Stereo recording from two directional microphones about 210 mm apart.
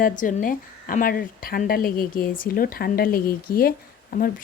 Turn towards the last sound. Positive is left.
turn(degrees=45)  # may be behind; listen again after turning